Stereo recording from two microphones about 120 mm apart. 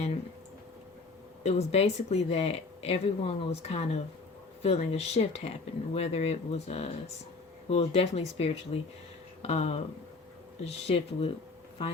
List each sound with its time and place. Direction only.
1.5 s speech: 60° left (ahead or behind)